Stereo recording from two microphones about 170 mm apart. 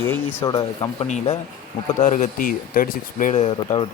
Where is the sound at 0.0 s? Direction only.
15° left (ahead or behind).